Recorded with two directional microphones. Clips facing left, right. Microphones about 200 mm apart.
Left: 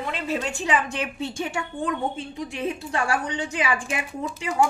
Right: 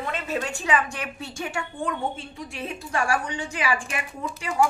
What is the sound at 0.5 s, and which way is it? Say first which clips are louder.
A woman's voice: left 1 dB; 20° left (ahead or behind).